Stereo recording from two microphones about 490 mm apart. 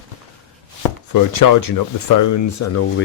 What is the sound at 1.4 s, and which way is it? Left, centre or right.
Speech, left.